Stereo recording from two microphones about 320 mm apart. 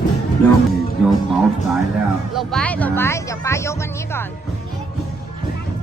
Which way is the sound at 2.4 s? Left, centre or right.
Centre.